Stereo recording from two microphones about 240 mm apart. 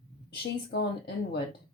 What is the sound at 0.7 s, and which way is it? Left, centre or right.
Speech, left.